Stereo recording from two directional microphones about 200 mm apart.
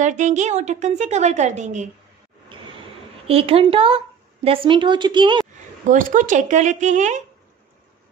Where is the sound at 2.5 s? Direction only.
25° right (ahead or behind).